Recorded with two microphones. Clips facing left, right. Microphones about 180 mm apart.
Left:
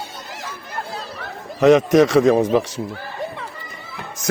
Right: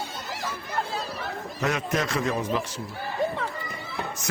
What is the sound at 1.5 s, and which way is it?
Speech, 90° left.